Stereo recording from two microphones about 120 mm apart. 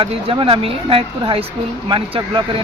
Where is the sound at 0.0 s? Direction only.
50° right (ahead or behind).